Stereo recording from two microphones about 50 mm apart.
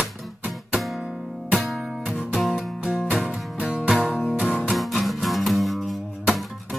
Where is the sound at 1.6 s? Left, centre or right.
Centre.